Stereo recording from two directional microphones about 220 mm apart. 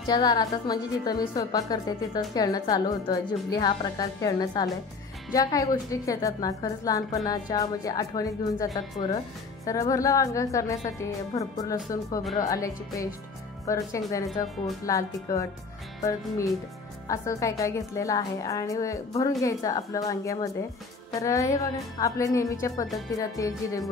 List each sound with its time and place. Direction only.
0.0 s a woman's voice: 20° left (ahead or behind)
9.7 s a woman's voice: 15° left (ahead or behind)
14.9 s a woman's voice: 15° left (ahead or behind)